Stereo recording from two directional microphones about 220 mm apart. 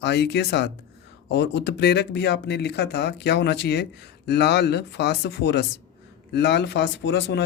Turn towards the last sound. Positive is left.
turn(degrees=50)  # may be behind; listen again after turning